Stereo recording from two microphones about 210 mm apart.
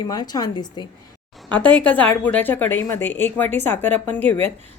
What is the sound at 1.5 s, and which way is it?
A woman's voice, 10° left (ahead or behind).